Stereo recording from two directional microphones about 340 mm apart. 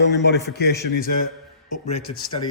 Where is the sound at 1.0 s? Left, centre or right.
Left.